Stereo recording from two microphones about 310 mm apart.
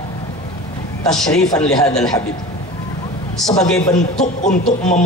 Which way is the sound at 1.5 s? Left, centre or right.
Centre.